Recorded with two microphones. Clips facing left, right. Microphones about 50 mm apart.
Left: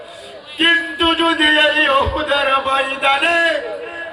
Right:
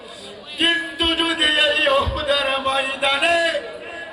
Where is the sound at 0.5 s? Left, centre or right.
Left.